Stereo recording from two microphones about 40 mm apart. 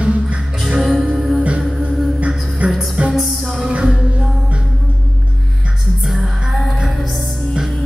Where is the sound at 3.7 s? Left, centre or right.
Right.